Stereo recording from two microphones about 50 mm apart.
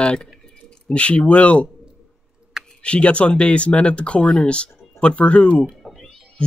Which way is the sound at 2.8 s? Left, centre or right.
Left.